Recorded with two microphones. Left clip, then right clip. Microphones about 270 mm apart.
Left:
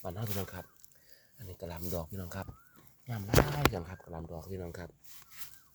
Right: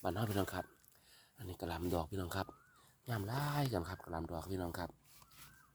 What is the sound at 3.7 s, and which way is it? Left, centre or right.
Speech, right.